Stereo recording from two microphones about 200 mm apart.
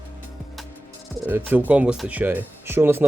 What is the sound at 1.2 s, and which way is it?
Speech, 10° right (ahead or behind).